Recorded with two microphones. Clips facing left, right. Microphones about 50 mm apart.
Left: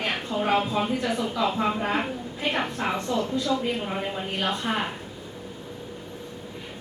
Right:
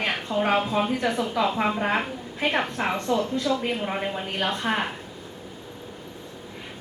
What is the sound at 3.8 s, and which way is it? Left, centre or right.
Speech, centre.